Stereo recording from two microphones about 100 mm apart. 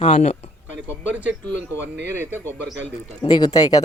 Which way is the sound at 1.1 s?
15° right (ahead or behind).